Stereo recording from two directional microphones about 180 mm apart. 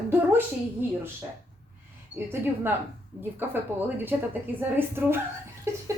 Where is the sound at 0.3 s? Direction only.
10° right (ahead or behind).